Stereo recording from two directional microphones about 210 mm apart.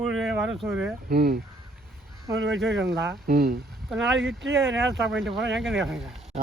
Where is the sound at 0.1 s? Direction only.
5° right (ahead or behind).